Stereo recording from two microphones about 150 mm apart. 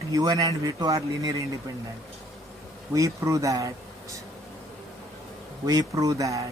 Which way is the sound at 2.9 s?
20° right (ahead or behind).